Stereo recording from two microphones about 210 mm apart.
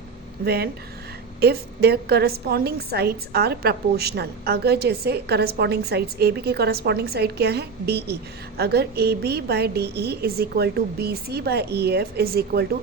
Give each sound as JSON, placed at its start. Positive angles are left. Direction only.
{"t": 0.4, "sound": "a woman's voice", "side_deg": -50}